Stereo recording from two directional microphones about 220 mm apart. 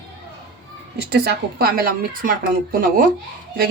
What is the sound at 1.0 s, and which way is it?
Speech, 45° right (ahead or behind).